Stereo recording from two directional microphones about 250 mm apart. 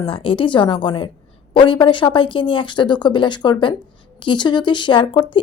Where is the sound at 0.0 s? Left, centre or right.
Left.